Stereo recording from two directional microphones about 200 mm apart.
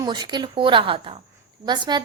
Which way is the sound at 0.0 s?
20° right (ahead or behind).